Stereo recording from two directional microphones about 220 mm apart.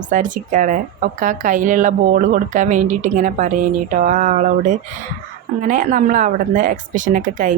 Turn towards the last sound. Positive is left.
turn(degrees=-35)  # may be behind; listen again after turning